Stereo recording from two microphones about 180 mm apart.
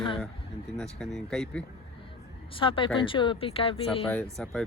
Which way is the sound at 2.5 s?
30° left (ahead or behind).